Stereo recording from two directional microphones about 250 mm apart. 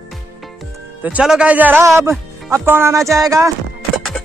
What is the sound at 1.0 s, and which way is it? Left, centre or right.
A man's voice, centre.